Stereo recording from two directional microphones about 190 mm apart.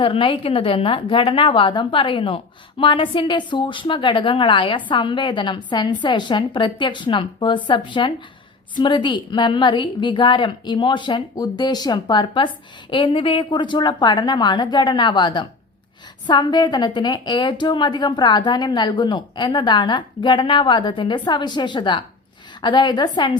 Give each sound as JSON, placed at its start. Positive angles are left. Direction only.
{"t": 0.0, "sound": "a woman's voice", "side_deg": 25}